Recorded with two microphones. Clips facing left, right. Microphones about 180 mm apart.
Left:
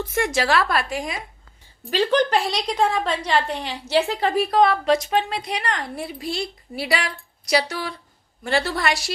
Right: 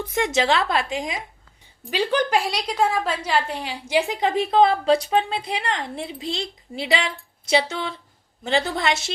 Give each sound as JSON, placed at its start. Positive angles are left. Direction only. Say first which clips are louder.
{"t": 0.0, "sound": "a woman's voice", "louder": "right 1 dB", "side_deg": -15}